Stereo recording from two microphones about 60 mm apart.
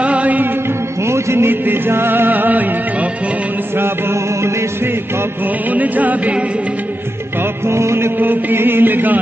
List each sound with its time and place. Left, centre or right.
0.0 s music: right
1.0 s music: right
3.7 s music: right
5.7 s music: right
7.6 s music: right
8.2 s chant: right